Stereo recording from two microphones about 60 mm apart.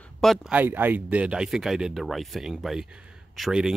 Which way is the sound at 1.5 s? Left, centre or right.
Centre.